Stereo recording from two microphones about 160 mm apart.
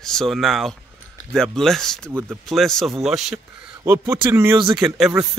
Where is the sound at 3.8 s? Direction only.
15° right (ahead or behind).